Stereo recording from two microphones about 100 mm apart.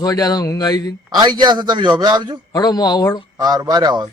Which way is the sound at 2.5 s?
40° left (ahead or behind).